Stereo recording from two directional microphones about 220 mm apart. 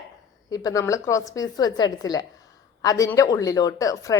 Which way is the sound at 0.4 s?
15° left (ahead or behind).